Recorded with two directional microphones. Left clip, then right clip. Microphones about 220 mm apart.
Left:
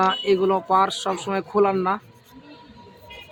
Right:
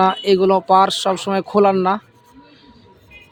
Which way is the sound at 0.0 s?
35° right (ahead or behind).